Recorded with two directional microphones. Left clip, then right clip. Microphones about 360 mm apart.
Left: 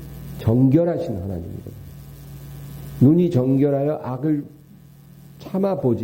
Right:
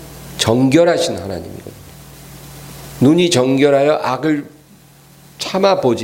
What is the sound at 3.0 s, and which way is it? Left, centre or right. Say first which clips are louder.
Speech: right 6 dB; centre.